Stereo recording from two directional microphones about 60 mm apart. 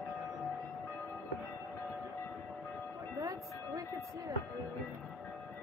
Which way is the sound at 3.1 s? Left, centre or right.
Right.